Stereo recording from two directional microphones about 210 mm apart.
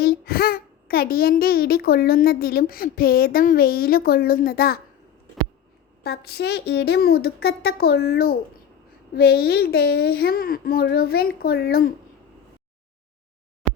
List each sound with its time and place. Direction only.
0.0 s a child's voice: 45° left (ahead or behind)
6.0 s a child's voice: 50° left (ahead or behind)